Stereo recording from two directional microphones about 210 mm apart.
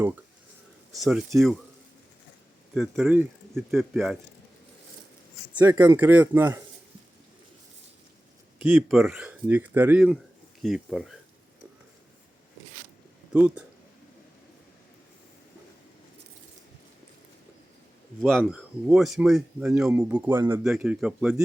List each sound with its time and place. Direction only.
0.9 s speech: centre (ahead or behind)
2.7 s speech: centre (ahead or behind)
5.5 s speech: 10° right (ahead or behind)
8.6 s speech: 5° right (ahead or behind)
13.3 s speech: 5° right (ahead or behind)
18.2 s speech: centre (ahead or behind)